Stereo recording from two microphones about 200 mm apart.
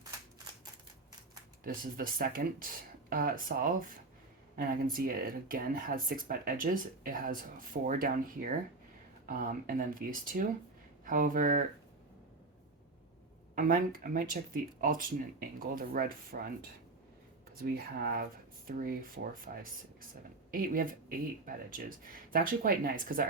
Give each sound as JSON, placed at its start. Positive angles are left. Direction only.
{"t": 1.6, "sound": "speech", "side_deg": -45}
{"t": 13.6, "sound": "speech", "side_deg": -45}
{"t": 17.6, "sound": "speech", "side_deg": -50}